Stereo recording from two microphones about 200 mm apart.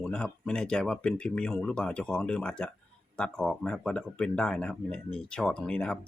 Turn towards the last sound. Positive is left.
turn(degrees=5)  # may be behind; listen again after turning